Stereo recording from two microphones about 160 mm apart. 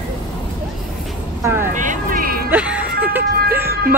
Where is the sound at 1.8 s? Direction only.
55° right (ahead or behind).